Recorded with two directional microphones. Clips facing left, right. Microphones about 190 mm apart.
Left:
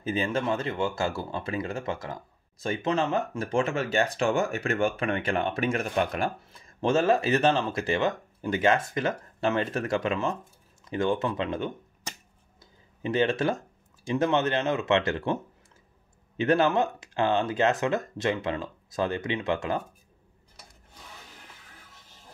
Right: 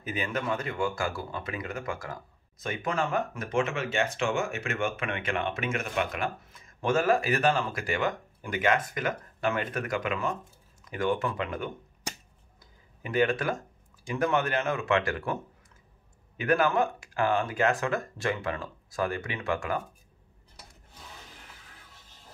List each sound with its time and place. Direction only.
0.0 s speech: 30° left (ahead or behind)
13.0 s speech: 25° left (ahead or behind)
16.3 s speech: 25° left (ahead or behind)